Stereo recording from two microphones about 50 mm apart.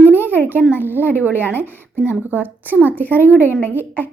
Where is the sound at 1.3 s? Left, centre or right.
Left.